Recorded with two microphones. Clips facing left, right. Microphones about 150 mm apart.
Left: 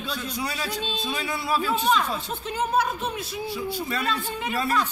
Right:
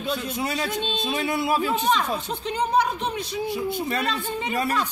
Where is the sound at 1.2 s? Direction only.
50° right (ahead or behind).